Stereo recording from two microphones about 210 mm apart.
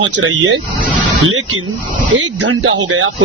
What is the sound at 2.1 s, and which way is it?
Speech, 70° right (ahead or behind).